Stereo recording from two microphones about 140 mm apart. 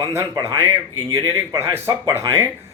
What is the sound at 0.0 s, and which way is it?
A man's voice, 20° right (ahead or behind).